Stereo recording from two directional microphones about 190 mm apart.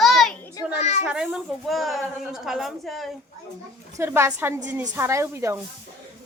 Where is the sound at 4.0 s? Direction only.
15° right (ahead or behind).